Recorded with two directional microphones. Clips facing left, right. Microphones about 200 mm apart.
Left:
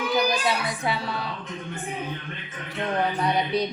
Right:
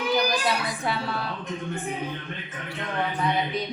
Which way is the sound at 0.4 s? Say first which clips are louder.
Left 1 dB; centre (ahead or behind).